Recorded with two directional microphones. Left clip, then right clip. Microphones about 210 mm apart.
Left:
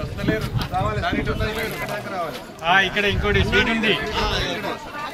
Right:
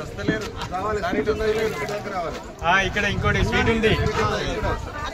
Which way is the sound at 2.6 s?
45° right (ahead or behind).